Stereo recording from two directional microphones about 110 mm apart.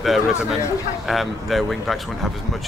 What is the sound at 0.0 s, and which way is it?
Speech, 5° right (ahead or behind).